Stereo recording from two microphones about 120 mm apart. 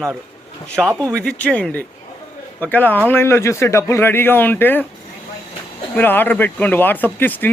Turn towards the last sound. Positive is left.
turn(degrees=15)  # may be behind; listen again after turning